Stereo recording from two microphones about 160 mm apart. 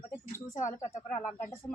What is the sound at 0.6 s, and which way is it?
Speech, 15° left (ahead or behind).